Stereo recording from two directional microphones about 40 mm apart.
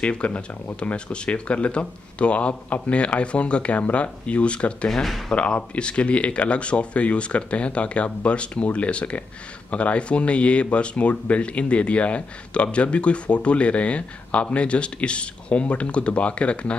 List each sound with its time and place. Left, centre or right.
0.0 s speech: left